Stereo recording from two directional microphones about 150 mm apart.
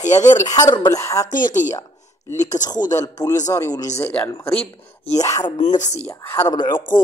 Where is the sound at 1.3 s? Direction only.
60° left (ahead or behind).